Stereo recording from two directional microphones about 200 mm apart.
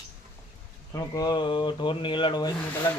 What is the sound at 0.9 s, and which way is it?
Speech, 20° left (ahead or behind).